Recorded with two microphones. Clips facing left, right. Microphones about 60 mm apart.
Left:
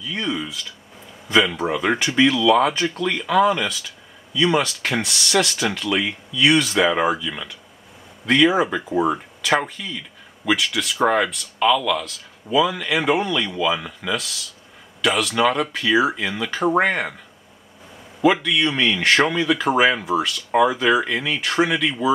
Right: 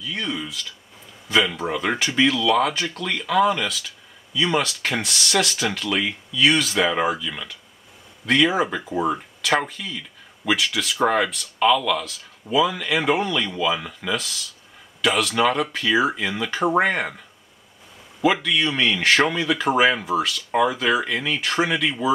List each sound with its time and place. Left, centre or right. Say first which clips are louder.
0.0 s a man's voice: left 2 dB; centre
18.2 s a man's voice: left 2 dB; centre